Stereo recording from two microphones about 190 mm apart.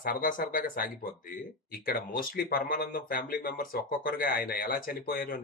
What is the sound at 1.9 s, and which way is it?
Speech, 50° left (ahead or behind).